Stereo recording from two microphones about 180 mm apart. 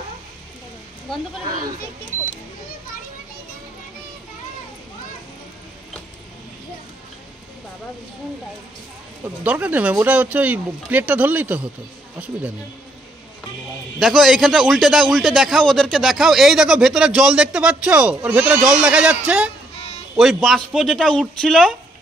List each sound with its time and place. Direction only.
9.2 s speech: 10° right (ahead or behind)
13.9 s a man's voice: centre (ahead or behind)